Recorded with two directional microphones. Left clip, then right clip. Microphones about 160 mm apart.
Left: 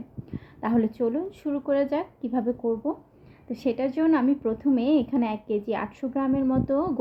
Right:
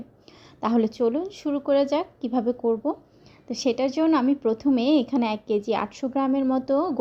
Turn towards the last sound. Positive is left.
turn(degrees=-20)  # may be behind; listen again after turning